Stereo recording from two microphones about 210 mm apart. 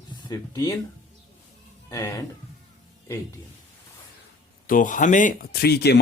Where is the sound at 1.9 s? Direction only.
15° left (ahead or behind).